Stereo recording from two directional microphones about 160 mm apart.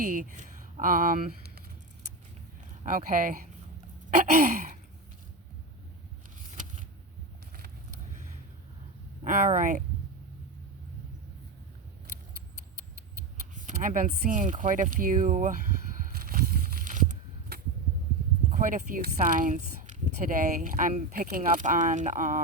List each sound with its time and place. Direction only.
0.0 s speech: 60° right (ahead or behind)
2.8 s speech: 55° right (ahead or behind)
9.2 s speech: 55° right (ahead or behind)
13.6 s speech: 55° right (ahead or behind)
16.2 s a sound: 65° right (ahead or behind)
18.5 s speech: 55° right (ahead or behind)